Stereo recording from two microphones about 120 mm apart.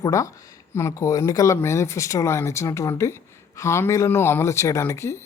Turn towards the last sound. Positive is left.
turn(degrees=20)  # may be behind; listen again after turning